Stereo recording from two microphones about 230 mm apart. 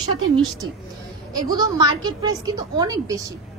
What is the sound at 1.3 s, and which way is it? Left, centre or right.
A woman's voice, centre.